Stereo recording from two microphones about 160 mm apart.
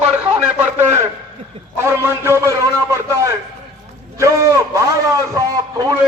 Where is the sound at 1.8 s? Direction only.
15° right (ahead or behind).